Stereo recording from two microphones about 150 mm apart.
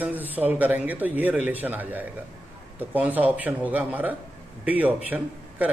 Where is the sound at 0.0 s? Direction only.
10° right (ahead or behind).